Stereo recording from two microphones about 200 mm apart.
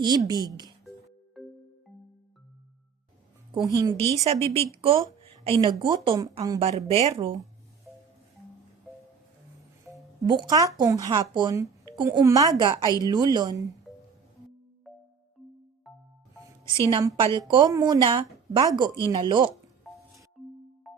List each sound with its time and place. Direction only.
0.0 s speech: 20° right (ahead or behind)
1.4 s music: centre (ahead or behind)
3.7 s speech: 15° right (ahead or behind)
3.9 s speech: 30° right (ahead or behind)
6.7 s speech: 30° right (ahead or behind)
9.9 s speech: 20° right (ahead or behind)
14.9 s music: centre (ahead or behind)
16.9 s speech: 20° right (ahead or behind)
20.9 s music: centre (ahead or behind)